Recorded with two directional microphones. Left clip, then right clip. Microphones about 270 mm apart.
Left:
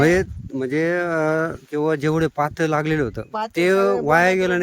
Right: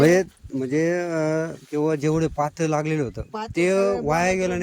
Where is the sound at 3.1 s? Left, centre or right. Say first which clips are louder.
Left 4 dB; left.